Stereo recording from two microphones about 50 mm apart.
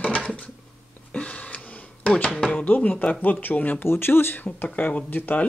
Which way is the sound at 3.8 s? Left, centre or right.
Left.